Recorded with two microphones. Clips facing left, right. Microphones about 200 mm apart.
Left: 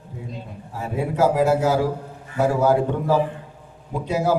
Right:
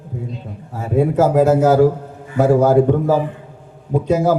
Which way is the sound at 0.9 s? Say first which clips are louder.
Right 6 dB; 50° right (ahead or behind).